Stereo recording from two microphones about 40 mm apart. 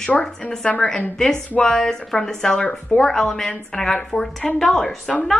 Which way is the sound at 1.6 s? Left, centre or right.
Centre.